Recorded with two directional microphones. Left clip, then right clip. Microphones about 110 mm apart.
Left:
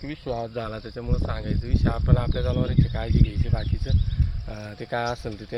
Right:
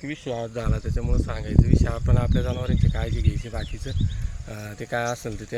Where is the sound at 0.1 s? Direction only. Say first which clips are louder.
Even; 10° right (ahead or behind).